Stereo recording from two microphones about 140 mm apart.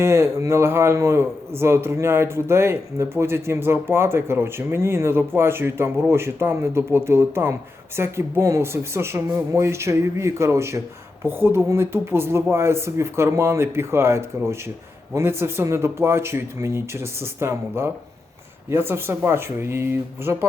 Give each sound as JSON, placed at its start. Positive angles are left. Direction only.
{"t": 0.0, "sound": "speech", "side_deg": -20}